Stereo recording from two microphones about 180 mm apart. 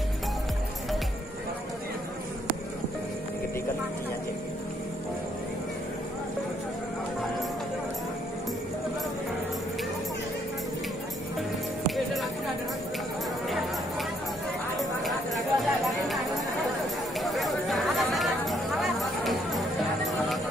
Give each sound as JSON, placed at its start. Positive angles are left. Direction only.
{"t": 11.9, "sound": "music", "side_deg": 0}
{"t": 14.8, "sound": "a sound", "side_deg": 0}
{"t": 17.2, "sound": "chatter", "side_deg": 0}